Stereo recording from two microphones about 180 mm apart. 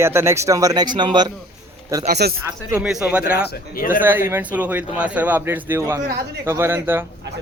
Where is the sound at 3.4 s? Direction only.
50° left (ahead or behind).